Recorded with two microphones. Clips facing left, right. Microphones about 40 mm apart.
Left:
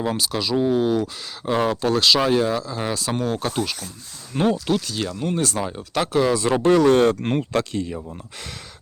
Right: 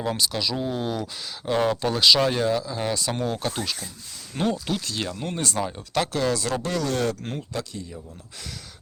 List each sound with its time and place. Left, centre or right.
0.0 s speech: centre
6.5 s speech: left
7.3 s speech: left